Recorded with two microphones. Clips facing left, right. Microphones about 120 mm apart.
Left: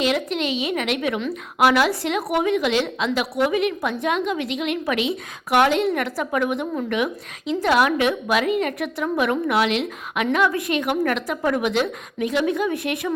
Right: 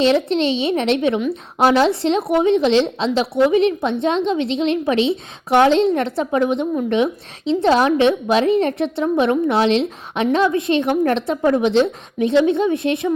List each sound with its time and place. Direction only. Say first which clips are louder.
0.0 s a woman's voice: right 6 dB; 30° right (ahead or behind)